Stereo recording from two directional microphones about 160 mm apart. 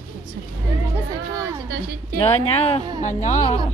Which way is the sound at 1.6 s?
90° right.